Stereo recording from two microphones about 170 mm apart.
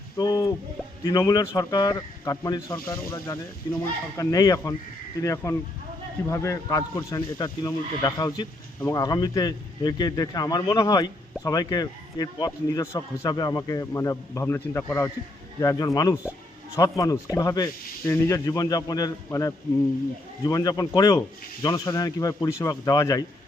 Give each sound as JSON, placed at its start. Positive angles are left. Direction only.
{"t": 0.2, "sound": "speech", "side_deg": 20}